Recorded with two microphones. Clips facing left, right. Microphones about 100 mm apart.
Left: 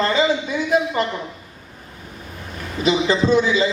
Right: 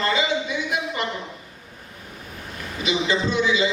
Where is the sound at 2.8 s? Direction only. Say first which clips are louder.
Left 5 dB; 40° left (ahead or behind).